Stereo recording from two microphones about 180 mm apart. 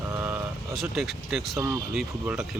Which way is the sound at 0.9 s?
Centre (ahead or behind).